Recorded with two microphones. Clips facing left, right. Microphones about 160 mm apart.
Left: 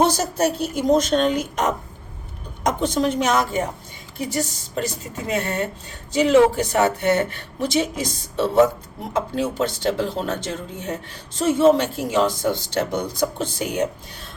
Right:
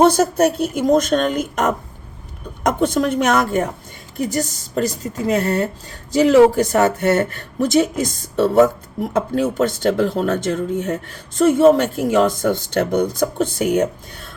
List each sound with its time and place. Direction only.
0.0 s a woman's voice: 55° right (ahead or behind)